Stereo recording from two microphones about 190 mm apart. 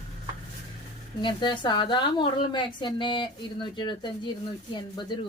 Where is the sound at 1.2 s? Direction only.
25° left (ahead or behind).